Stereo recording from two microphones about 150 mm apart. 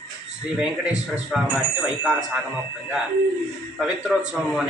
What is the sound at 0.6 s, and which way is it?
A man's voice, 5° right (ahead or behind).